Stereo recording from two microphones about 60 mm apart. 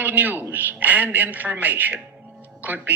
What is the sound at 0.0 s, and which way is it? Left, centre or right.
A man's voice, right.